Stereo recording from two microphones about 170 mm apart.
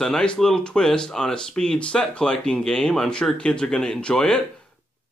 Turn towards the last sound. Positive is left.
turn(degrees=5)  # may be behind; listen again after turning